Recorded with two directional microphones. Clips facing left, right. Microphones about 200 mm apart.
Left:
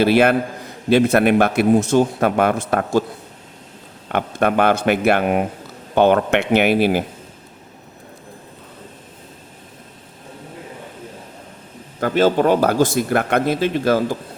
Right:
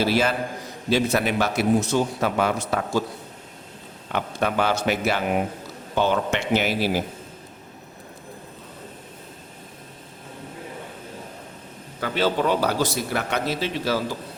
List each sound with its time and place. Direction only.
0.0 s a man's voice: 60° left (ahead or behind)
4.1 s a man's voice: 55° left (ahead or behind)
11.9 s a man's voice: 50° left (ahead or behind)